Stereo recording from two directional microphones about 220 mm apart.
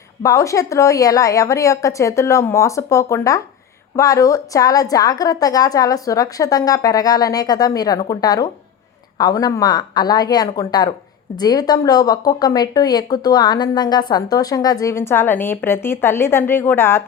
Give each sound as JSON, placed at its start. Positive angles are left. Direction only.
{"t": 0.2, "sound": "a woman's voice", "side_deg": 15}